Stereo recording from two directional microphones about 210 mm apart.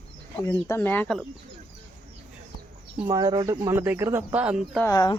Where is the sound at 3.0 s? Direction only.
15° right (ahead or behind).